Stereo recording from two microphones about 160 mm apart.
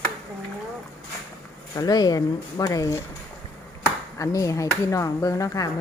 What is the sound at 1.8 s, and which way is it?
Speech, 25° left (ahead or behind).